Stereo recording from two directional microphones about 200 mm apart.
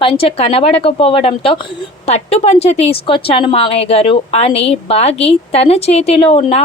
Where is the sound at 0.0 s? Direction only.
25° left (ahead or behind).